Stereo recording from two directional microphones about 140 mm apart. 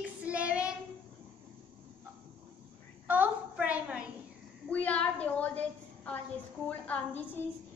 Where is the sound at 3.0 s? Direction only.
10° right (ahead or behind).